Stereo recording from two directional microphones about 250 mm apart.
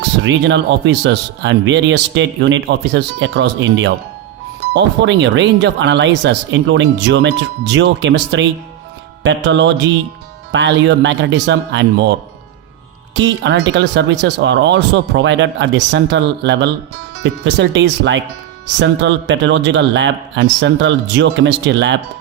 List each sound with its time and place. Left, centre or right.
0.2 s speech: right
13.1 s speech: right